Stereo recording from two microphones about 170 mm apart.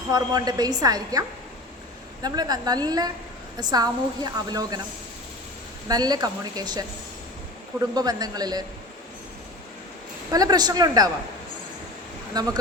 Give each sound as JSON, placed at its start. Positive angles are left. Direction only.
{"t": 0.1, "sound": "a woman's voice", "side_deg": -25}
{"t": 2.2, "sound": "a woman's voice", "side_deg": -25}
{"t": 5.9, "sound": "a woman's voice", "side_deg": -25}
{"t": 7.9, "sound": "a woman's voice", "side_deg": -20}
{"t": 10.3, "sound": "a woman's voice", "side_deg": -25}
{"t": 12.3, "sound": "a woman's voice", "side_deg": -25}